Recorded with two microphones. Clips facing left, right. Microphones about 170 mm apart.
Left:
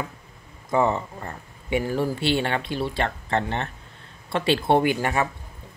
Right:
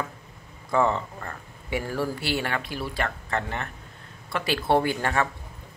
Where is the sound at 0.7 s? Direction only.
15° left (ahead or behind).